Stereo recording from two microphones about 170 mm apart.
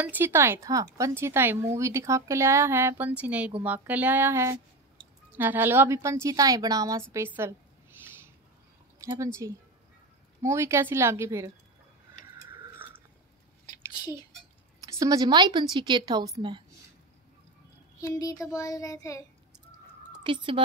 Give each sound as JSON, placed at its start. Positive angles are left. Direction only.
{"t": 0.0, "sound": "a woman's voice", "side_deg": -10}
{"t": 8.9, "sound": "a woman's voice", "side_deg": -20}
{"t": 12.4, "sound": "a sound", "side_deg": -10}
{"t": 14.8, "sound": "a woman's voice", "side_deg": -20}
{"t": 18.0, "sound": "child singing", "side_deg": 20}
{"t": 20.1, "sound": "speech", "side_deg": -30}